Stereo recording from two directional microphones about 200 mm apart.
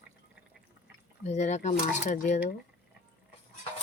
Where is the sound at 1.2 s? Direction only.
35° left (ahead or behind).